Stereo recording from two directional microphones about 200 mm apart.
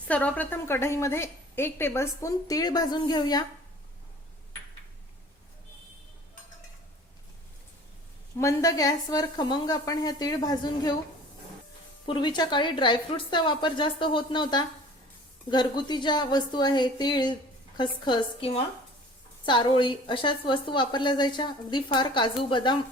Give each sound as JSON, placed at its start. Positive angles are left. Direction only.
{"t": 0.1, "sound": "a woman's voice", "side_deg": 5}
{"t": 8.4, "sound": "a woman's voice", "side_deg": 15}
{"t": 12.0, "sound": "a woman's voice", "side_deg": 25}